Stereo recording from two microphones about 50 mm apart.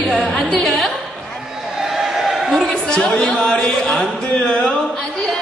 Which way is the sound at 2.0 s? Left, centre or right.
Centre.